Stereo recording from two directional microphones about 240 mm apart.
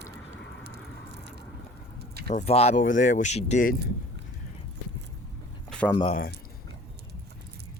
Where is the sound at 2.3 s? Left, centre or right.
Left.